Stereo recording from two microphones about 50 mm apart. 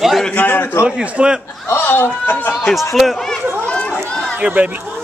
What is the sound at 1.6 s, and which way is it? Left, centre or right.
Speech, left.